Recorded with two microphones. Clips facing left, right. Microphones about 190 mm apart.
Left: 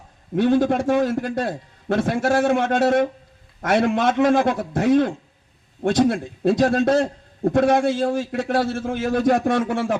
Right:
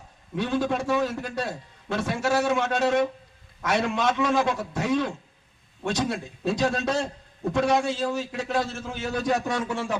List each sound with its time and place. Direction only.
0.3 s a man's voice: 50° left (ahead or behind)